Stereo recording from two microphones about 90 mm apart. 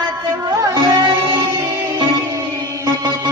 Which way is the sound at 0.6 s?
45° right (ahead or behind).